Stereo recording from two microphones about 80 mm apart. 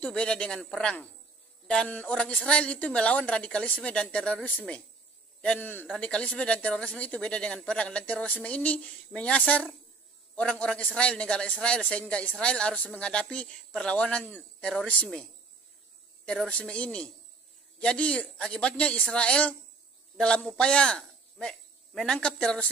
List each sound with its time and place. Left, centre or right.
0.0 s a man's voice: centre
5.9 s a man's voice: centre
16.3 s a man's voice: centre